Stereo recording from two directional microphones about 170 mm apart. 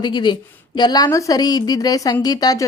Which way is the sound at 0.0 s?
25° left (ahead or behind).